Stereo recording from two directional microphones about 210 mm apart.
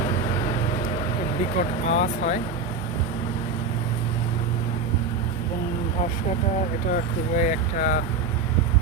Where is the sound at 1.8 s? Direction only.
35° left (ahead or behind).